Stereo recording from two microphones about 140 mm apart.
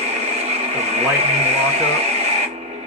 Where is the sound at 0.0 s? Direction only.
50° right (ahead or behind).